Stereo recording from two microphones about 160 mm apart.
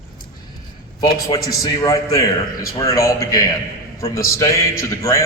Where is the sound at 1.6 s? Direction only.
20° left (ahead or behind).